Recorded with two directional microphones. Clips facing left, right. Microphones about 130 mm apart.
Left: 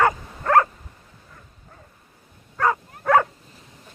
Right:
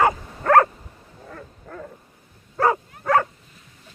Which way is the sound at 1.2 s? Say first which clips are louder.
Right 14 dB; 85° right.